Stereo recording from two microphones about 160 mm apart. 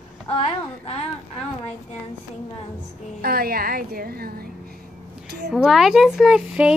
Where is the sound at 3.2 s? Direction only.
70° right (ahead or behind).